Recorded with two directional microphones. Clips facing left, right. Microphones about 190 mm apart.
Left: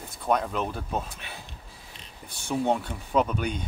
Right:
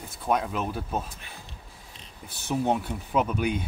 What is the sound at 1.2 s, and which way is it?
Speech, 75° left (ahead or behind).